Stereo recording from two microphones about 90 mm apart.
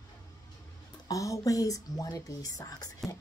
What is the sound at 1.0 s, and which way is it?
Speech, 40° left (ahead or behind).